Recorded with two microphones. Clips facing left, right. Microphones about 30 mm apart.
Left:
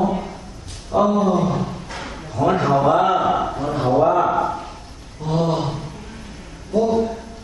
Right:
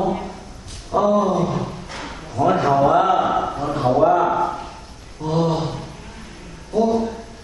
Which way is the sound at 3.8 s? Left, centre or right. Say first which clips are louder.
Right 1 dB; centre.